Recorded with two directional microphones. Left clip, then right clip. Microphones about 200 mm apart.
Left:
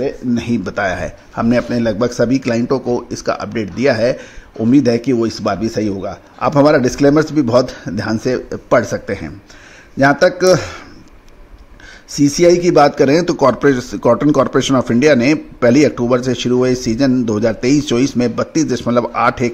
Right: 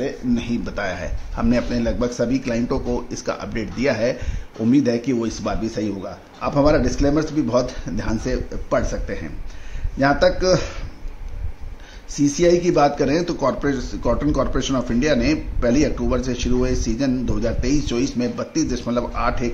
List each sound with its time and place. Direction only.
0.0 s speech: 35° left (ahead or behind)
12.1 s speech: 35° left (ahead or behind)